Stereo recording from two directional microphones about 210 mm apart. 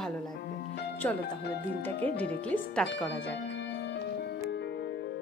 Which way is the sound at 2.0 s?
10° left (ahead or behind).